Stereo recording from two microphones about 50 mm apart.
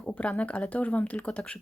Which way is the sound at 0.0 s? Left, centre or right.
Left.